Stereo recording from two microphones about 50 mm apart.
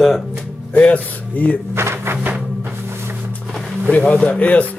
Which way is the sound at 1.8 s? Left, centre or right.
Right.